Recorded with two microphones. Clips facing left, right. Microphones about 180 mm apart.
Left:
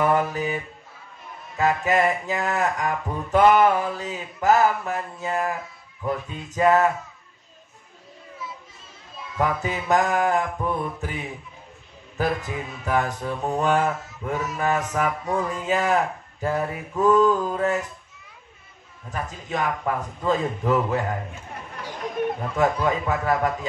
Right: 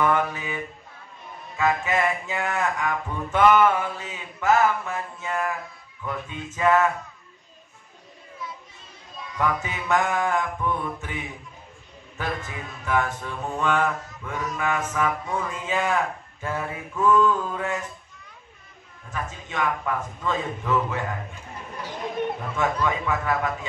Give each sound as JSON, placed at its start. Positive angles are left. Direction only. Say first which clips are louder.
{"t": 0.0, "sound": "speech", "louder": "left 2 dB", "side_deg": 40}
{"t": 1.6, "sound": "speech", "louder": "left 3 dB", "side_deg": 35}
{"t": 9.4, "sound": "speech", "louder": "left 2 dB", "side_deg": 35}
{"t": 12.4, "sound": "speech", "louder": "left 3 dB", "side_deg": 35}
{"t": 19.0, "sound": "speech", "louder": "left 2 dB", "side_deg": 35}
{"t": 22.6, "sound": "speech", "louder": "left 3 dB", "side_deg": 35}